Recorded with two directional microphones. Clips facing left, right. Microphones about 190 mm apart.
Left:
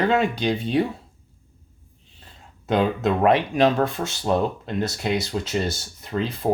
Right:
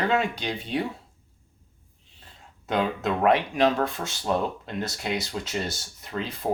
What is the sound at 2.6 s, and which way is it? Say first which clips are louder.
Speech: left 5 dB; 30° left (ahead or behind).